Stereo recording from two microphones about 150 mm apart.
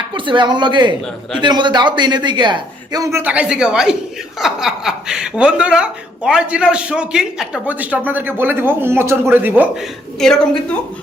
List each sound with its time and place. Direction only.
0.1 s speech: 30° right (ahead or behind); by 9.6 s 15° right (ahead or behind)
10.2 s a woman's voice: 5° left (ahead or behind)